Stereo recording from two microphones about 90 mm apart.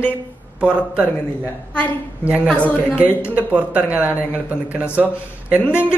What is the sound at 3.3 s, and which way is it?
Speech, 15° right (ahead or behind).